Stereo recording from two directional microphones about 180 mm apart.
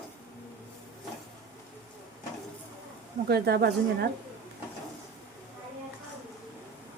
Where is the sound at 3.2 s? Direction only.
60° right (ahead or behind).